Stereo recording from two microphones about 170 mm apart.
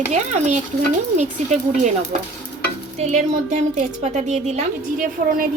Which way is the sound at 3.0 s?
45° right (ahead or behind).